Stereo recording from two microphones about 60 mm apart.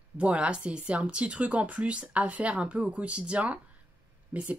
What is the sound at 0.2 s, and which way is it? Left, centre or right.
Speech, centre.